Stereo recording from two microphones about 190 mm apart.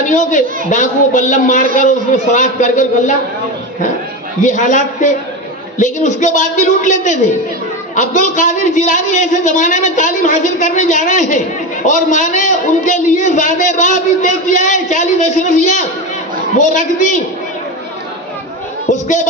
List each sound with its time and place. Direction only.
0.0 s a man's voice: 40° left (ahead or behind)
4.4 s a man's voice: 40° left (ahead or behind)
18.9 s a man's voice: 40° left (ahead or behind)